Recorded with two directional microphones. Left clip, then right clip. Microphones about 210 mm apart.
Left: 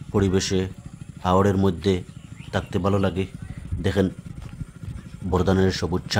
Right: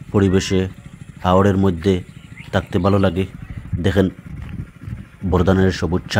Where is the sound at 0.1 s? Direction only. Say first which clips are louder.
Right 5 dB; 15° right (ahead or behind).